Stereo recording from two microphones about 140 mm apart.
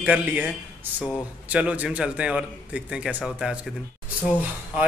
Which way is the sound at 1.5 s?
10° right (ahead or behind).